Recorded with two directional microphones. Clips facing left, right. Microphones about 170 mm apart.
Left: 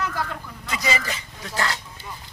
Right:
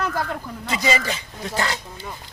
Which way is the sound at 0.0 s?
50° right (ahead or behind).